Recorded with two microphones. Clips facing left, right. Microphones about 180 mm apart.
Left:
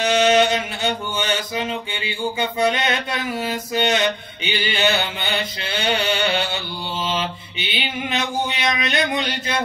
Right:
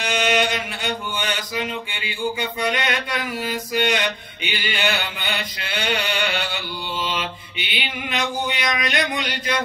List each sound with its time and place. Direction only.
0.0 s mantra: 25° left (ahead or behind)